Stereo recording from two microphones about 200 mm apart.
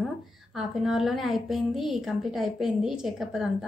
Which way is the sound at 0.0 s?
Centre (ahead or behind).